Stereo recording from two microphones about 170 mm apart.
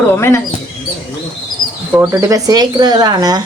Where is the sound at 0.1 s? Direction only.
15° left (ahead or behind).